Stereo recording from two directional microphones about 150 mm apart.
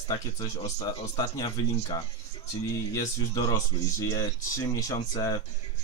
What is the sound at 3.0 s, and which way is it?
Speech, 25° left (ahead or behind).